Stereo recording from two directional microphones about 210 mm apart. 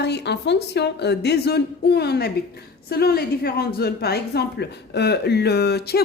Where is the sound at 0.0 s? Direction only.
55° left (ahead or behind).